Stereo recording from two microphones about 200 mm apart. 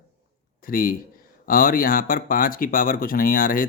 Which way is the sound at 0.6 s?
45° left (ahead or behind).